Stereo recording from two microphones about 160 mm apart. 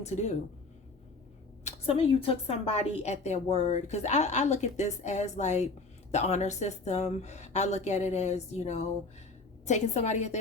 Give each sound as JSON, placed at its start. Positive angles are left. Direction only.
{"t": 0.0, "sound": "a woman's voice", "side_deg": 45}
{"t": 1.6, "sound": "a woman's voice", "side_deg": 40}